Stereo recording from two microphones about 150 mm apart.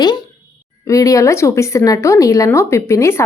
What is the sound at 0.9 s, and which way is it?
A woman's voice, 20° left (ahead or behind).